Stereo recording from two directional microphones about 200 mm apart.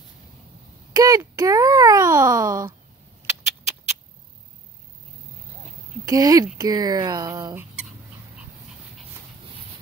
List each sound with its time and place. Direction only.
0.9 s a child's voice: 15° right (ahead or behind)
3.3 s a sound: 10° right (ahead or behind)
6.0 s a child's voice: 15° right (ahead or behind)